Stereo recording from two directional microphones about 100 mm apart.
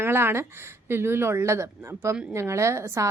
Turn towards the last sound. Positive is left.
turn(degrees=-30)  # may be behind; listen again after turning